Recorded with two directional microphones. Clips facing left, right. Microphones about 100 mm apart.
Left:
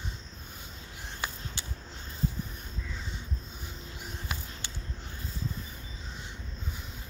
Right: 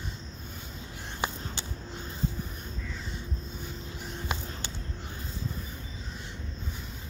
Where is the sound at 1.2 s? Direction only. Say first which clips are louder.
Right 5 dB; 30° right (ahead or behind).